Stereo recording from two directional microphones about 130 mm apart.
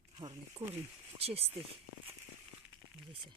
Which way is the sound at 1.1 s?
50° right (ahead or behind).